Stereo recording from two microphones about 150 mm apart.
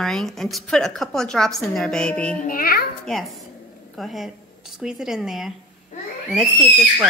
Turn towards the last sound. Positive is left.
turn(degrees=0)  # may be behind; listen again after turning